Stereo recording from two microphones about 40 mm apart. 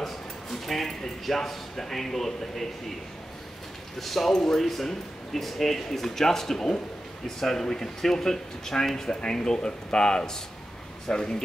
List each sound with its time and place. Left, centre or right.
0.0 s speech: centre
4.0 s speech: centre